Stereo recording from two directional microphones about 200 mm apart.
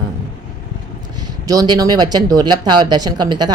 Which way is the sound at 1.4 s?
20° right (ahead or behind).